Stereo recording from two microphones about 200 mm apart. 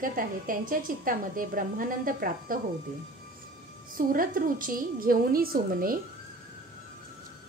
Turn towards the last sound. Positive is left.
turn(degrees=-45)  # may be behind; listen again after turning